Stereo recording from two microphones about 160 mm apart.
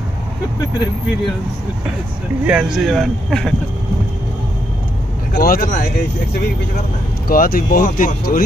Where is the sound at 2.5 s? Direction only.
5° right (ahead or behind).